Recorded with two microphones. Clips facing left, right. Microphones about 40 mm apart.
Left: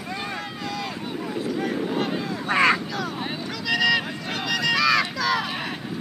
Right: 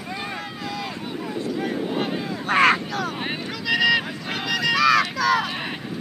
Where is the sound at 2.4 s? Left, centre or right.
Right.